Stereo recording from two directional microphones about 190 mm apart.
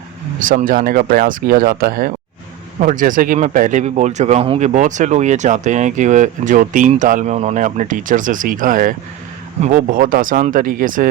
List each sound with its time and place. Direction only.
0.4 s speech: 45° right (ahead or behind)